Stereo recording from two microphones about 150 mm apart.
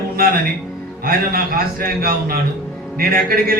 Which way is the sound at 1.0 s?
80° right.